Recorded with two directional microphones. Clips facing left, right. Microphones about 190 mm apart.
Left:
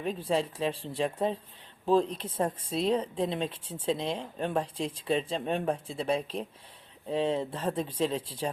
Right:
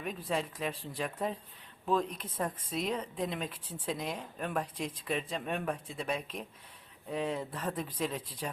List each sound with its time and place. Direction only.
0.0 s speech: 30° left (ahead or behind)